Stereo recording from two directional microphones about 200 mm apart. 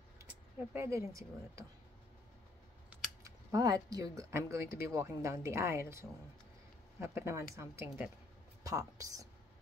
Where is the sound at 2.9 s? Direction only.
15° right (ahead or behind).